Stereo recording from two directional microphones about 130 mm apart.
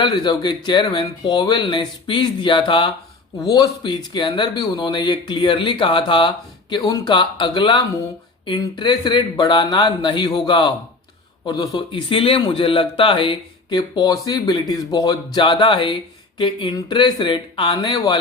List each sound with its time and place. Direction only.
0.0 s speech: 35° left (ahead or behind)
3.4 s speech: 30° left (ahead or behind)